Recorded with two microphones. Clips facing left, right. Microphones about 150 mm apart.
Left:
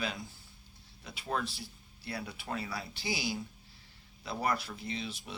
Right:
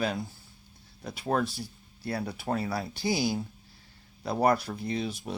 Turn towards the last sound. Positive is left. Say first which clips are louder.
# right 8 dB
turn(degrees=-45)  # may be behind; listen again after turning